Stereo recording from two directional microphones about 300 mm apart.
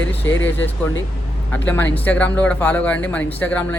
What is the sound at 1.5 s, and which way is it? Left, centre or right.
Speech, centre.